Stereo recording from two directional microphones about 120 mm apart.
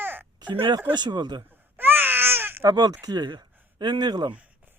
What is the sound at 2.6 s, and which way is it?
Speech, 30° right (ahead or behind).